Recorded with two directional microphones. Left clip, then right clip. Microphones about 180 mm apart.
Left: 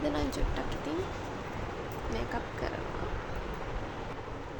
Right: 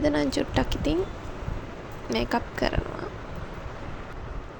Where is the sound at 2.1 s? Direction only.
45° right (ahead or behind).